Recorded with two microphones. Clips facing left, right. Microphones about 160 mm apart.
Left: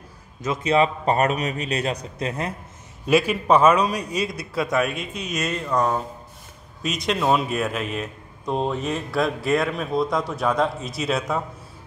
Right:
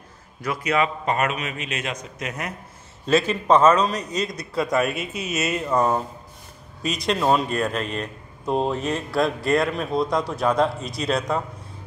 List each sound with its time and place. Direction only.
0.4 s a man's voice: 25° left (ahead or behind)
3.1 s speech: 10° left (ahead or behind)